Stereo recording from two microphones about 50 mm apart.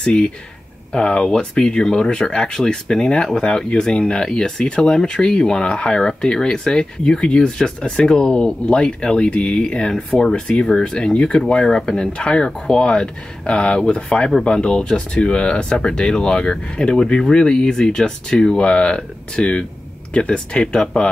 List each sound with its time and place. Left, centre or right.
0.0 s speech: centre